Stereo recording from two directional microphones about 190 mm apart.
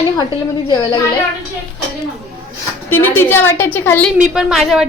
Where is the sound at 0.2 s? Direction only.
20° left (ahead or behind).